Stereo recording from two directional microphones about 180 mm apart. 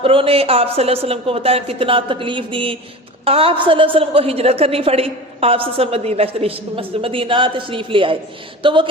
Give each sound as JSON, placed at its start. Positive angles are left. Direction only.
{"t": 0.0, "sound": "a woman's voice", "side_deg": -30}